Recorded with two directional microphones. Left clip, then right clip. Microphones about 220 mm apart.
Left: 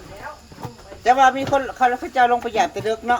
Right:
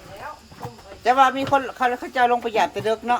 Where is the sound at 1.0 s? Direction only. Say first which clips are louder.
Left 2 dB; 10° right (ahead or behind).